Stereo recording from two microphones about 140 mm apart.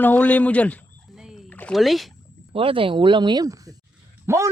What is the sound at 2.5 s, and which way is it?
A woman's voice, 40° right (ahead or behind).